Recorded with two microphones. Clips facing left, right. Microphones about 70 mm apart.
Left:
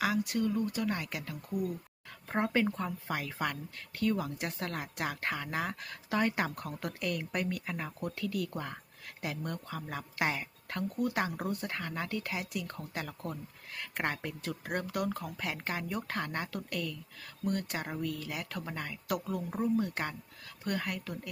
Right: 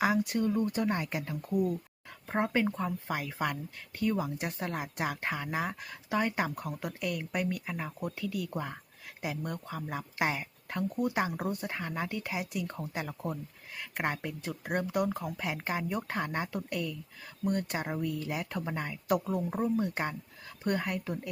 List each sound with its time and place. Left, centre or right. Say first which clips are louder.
0.0 s speech: right 3 dB; right
2.3 s speech: right 1 dB; centre
10.8 s speech: right 2 dB; centre